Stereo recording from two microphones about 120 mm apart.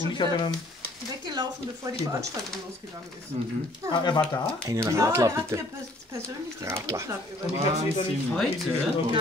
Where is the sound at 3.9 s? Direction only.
40° left (ahead or behind).